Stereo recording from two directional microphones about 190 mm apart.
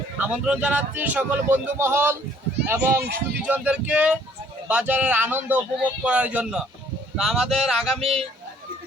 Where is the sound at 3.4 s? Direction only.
5° right (ahead or behind).